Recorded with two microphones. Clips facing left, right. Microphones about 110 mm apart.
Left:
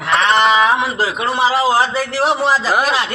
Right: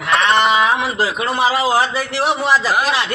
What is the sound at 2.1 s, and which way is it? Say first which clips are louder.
Speech: left 1 dB; 40° left (ahead or behind).